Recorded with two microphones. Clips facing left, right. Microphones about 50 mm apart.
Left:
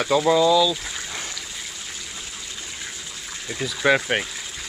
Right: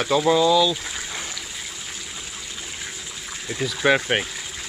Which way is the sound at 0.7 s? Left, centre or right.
Centre.